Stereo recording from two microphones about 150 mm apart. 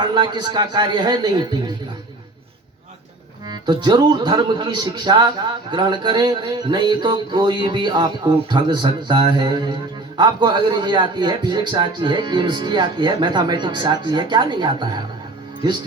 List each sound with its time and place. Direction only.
0.0 s a man's voice: 30° right (ahead or behind)
3.4 s a man's voice: 30° right (ahead or behind)
5.7 s a sound: 30° right (ahead or behind)
10.2 s a man's voice: 30° right (ahead or behind)